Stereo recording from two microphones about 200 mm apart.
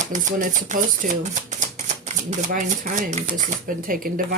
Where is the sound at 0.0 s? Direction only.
40° right (ahead or behind).